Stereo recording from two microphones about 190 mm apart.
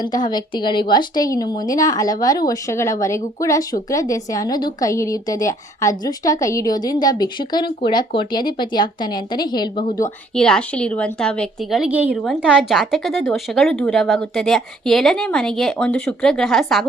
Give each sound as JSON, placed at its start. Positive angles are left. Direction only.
{"t": 0.0, "sound": "a woman's voice", "side_deg": 20}
{"t": 10.3, "sound": "speech", "side_deg": 5}